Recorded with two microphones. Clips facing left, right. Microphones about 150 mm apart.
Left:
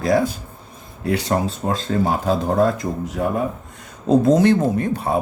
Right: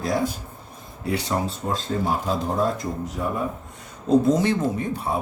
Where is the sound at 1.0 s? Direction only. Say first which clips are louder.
Left 5 dB; 80° left.